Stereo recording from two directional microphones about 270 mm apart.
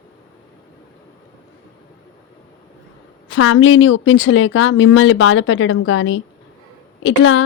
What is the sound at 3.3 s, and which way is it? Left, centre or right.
Speech, left.